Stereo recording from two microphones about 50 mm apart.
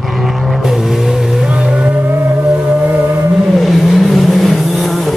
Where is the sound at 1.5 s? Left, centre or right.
Centre.